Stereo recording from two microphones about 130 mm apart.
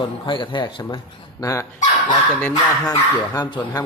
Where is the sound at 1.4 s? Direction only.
25° left (ahead or behind).